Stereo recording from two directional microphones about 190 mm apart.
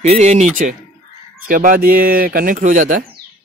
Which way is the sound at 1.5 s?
45° right (ahead or behind).